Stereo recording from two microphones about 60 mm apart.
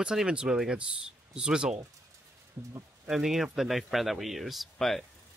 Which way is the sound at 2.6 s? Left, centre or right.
Right.